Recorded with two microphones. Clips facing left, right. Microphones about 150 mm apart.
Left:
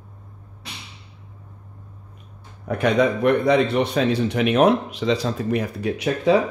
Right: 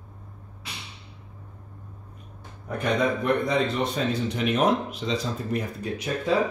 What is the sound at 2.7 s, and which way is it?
A man's voice, 80° left.